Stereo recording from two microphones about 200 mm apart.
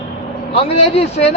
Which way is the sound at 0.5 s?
30° left (ahead or behind).